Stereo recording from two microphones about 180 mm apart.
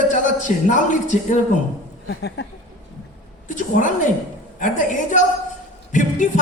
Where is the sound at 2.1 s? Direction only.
75° left (ahead or behind).